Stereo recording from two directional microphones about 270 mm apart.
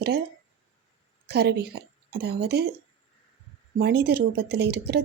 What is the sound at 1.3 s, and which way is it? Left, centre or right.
Speech, right.